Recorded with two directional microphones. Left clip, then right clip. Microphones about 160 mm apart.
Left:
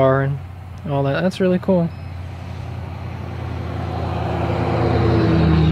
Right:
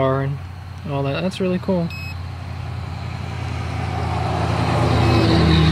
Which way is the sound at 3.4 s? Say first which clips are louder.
Right 1 dB; 50° left (ahead or behind).